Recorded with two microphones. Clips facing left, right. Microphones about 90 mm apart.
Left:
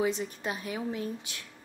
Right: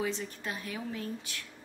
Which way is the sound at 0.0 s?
20° left (ahead or behind).